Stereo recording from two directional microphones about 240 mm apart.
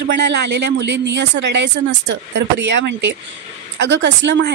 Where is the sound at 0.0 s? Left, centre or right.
Right.